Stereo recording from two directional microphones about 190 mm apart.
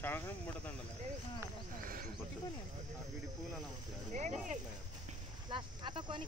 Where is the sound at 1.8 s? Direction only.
50° right (ahead or behind).